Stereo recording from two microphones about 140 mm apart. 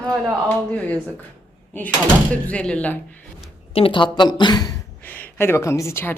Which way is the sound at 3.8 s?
40° left (ahead or behind).